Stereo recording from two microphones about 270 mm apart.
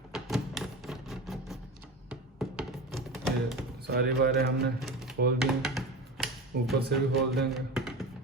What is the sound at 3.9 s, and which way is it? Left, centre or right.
Speech, right.